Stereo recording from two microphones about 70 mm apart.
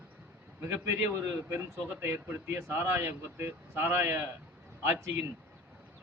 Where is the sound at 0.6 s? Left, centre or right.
Right.